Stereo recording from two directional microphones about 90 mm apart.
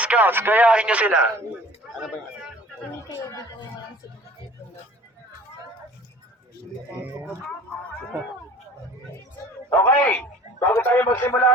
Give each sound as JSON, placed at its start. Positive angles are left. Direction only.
{"t": 0.0, "sound": "speech", "side_deg": -15}
{"t": 3.1, "sound": "speech", "side_deg": 35}
{"t": 9.6, "sound": "a sound", "side_deg": 25}
{"t": 10.0, "sound": "speech", "side_deg": 15}
{"t": 10.7, "sound": "speech", "side_deg": 25}